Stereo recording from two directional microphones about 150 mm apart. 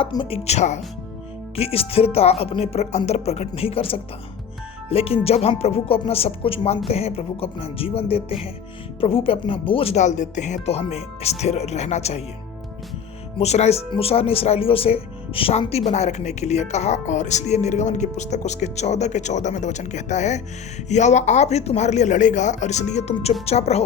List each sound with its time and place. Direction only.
0.0 s speech: 35° left (ahead or behind)
13.4 s speech: 45° left (ahead or behind)